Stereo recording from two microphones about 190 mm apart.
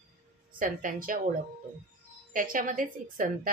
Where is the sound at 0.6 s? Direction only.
45° right (ahead or behind).